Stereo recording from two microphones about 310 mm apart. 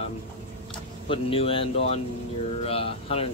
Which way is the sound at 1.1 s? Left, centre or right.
Centre.